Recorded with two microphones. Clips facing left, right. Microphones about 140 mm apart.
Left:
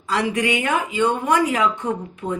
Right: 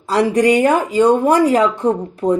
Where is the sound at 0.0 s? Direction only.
35° right (ahead or behind).